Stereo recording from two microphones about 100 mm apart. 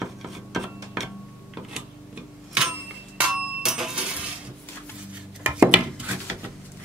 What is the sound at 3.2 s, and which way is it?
Bicycle bell, 5° right (ahead or behind).